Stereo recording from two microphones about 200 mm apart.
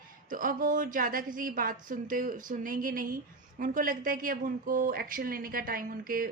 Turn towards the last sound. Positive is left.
turn(degrees=-45)  # may be behind; listen again after turning